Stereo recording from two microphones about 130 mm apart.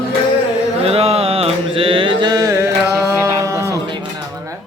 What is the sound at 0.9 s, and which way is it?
Mantra, 50° right (ahead or behind).